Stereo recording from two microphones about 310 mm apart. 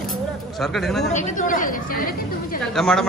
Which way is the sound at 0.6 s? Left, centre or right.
Centre.